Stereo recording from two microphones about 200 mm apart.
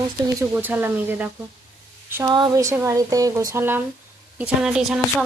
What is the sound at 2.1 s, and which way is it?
Speech, 20° right (ahead or behind).